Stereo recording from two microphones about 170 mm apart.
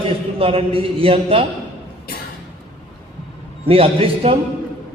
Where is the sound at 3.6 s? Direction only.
35° right (ahead or behind).